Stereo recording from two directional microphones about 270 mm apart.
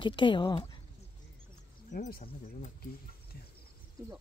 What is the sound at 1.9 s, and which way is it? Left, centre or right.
Speech, left.